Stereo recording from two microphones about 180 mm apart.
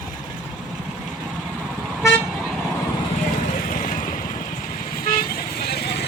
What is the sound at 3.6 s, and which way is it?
Vehicle, 50° left (ahead or behind).